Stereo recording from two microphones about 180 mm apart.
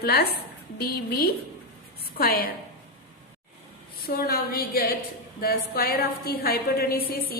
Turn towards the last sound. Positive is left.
turn(degrees=55)  # may be behind; listen again after turning